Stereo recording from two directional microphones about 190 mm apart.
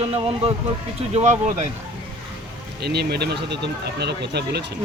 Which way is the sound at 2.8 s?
60° right (ahead or behind).